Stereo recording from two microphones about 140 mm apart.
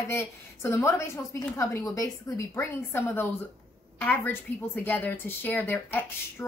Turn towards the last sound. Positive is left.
turn(degrees=15)  # may be behind; listen again after turning